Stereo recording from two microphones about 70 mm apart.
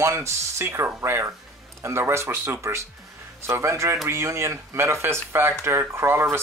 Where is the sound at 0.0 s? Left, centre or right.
Right.